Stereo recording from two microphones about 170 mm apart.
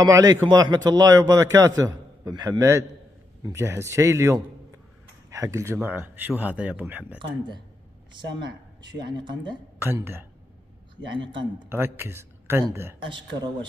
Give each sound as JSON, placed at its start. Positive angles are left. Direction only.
{"t": 0.0, "sound": "a man's voice", "side_deg": -25}
{"t": 7.2, "sound": "a man's voice", "side_deg": -25}
{"t": 9.1, "sound": "a man's voice", "side_deg": -25}
{"t": 9.8, "sound": "speech", "side_deg": -15}
{"t": 11.7, "sound": "a man's voice", "side_deg": -15}